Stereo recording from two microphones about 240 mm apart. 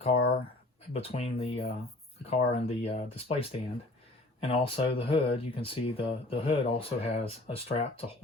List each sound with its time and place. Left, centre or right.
0.9 s speech: left